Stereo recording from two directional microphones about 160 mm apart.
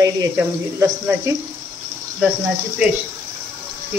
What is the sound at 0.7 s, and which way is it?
Speech, 15° right (ahead or behind).